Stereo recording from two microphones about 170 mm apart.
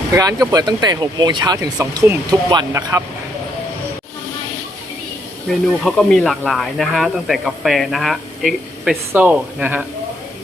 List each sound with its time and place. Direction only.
0.2 s speech: 20° right (ahead or behind)
5.5 s speech: centre (ahead or behind)